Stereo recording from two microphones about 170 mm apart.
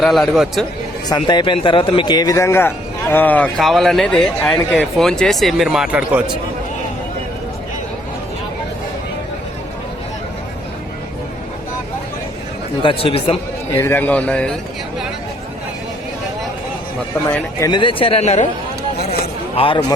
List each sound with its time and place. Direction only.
0.0 s a man's voice: centre (ahead or behind)
1.0 s a man's voice: 25° left (ahead or behind); by 6.2 s 5° right (ahead or behind)
12.8 s speech: 30° left (ahead or behind)
13.7 s a man's voice: 15° left (ahead or behind)
17.2 s speech: 20° left (ahead or behind); by 18.4 s 40° left (ahead or behind)
19.0 s a sound: 35° left (ahead or behind)